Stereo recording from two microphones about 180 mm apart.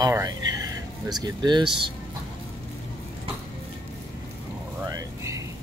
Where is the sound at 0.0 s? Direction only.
20° right (ahead or behind).